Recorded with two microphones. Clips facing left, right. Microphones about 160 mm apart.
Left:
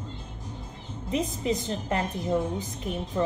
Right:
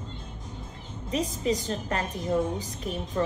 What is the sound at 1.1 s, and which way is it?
Speech, 20° left (ahead or behind).